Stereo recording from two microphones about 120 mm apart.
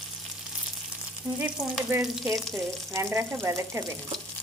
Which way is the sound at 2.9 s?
20° right (ahead or behind).